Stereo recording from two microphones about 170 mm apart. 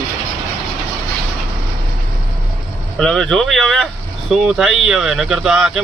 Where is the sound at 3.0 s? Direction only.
5° left (ahead or behind).